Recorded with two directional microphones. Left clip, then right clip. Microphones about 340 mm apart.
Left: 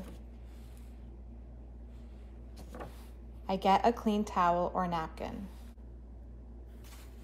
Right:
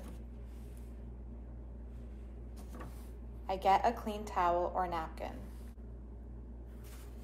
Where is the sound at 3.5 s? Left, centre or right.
Left.